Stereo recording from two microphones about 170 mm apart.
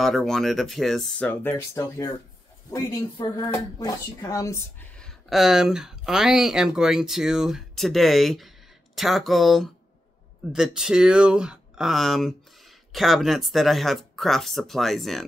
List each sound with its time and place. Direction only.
0.0 s speech: centre (ahead or behind)
4.9 s speech: centre (ahead or behind)